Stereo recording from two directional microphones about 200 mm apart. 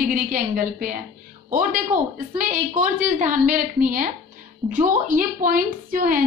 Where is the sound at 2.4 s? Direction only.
40° right (ahead or behind).